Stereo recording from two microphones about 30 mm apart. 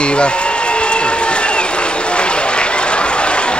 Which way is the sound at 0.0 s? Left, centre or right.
Left.